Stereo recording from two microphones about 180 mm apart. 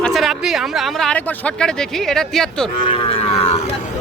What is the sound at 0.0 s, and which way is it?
Speech, centre (ahead or behind).